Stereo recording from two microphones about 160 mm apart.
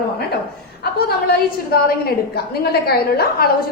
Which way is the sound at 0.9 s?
75° left (ahead or behind).